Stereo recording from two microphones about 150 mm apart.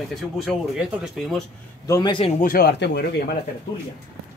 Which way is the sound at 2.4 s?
80° left.